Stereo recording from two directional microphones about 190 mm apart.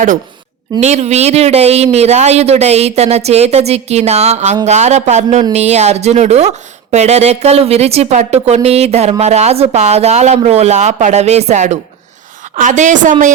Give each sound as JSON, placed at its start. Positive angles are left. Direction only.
{"t": 0.8, "sound": "speech", "side_deg": -35}